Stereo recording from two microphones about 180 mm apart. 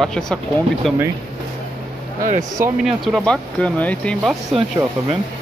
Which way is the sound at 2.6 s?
50° right (ahead or behind).